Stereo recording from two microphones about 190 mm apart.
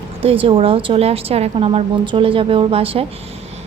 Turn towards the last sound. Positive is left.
turn(degrees=-30)  # may be behind; listen again after turning